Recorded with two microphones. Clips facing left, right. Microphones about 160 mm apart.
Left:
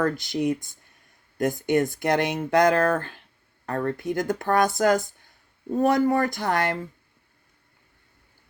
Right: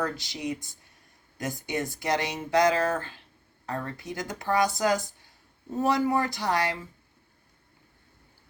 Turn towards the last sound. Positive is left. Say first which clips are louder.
# left 3 dB
turn(degrees=55)  # may be behind; listen again after turning